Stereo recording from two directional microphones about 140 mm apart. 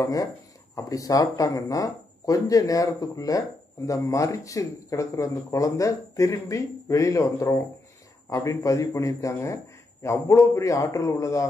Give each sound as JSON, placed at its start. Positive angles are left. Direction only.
{"t": 0.0, "sound": "speech", "side_deg": 25}